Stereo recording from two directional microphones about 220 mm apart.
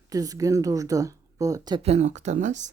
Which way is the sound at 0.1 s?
15° right (ahead or behind).